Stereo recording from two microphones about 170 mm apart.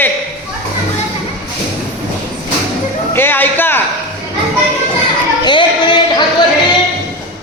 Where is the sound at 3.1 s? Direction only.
15° left (ahead or behind).